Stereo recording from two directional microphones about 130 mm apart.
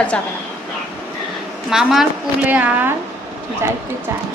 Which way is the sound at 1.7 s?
5° right (ahead or behind).